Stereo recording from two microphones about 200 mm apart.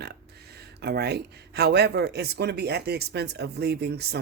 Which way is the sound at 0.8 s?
55° right (ahead or behind).